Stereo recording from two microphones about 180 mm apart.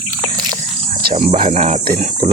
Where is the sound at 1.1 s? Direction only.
35° right (ahead or behind).